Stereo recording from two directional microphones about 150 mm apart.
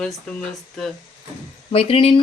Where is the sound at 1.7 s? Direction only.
40° left (ahead or behind).